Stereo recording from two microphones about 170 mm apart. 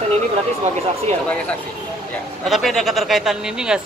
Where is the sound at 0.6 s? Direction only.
40° right (ahead or behind).